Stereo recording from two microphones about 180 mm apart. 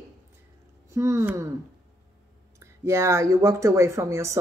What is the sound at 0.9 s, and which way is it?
Speech, 15° right (ahead or behind).